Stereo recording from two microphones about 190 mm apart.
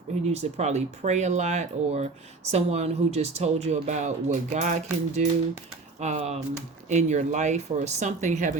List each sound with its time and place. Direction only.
0.3 s speech: 35° right (ahead or behind)